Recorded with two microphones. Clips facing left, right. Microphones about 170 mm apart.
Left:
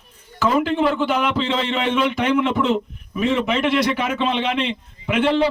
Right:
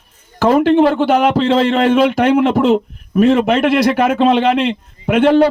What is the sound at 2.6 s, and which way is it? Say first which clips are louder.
A man's voice: right 7 dB; 60° right (ahead or behind).